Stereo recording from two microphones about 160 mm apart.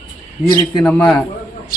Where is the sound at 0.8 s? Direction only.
5° left (ahead or behind).